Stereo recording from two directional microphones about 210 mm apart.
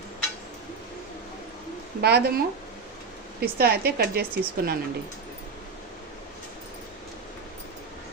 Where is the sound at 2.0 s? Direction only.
50° right (ahead or behind).